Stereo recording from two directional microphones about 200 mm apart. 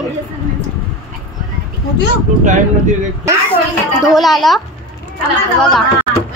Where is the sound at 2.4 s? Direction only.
35° right (ahead or behind).